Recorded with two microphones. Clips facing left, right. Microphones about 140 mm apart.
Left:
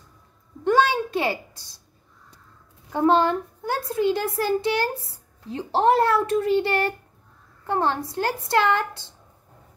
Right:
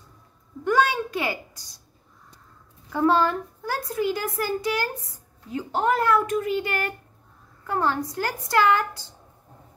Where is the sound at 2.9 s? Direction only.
25° left (ahead or behind).